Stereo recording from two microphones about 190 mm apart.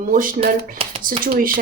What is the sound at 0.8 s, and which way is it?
Speech, 30° right (ahead or behind).